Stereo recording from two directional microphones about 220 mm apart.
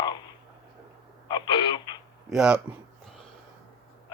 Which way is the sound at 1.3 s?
20° left (ahead or behind).